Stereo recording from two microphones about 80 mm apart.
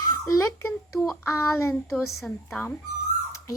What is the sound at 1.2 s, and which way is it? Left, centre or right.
Speech, left.